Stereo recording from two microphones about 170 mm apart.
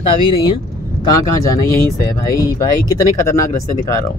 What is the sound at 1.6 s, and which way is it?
Speech, 20° left (ahead or behind).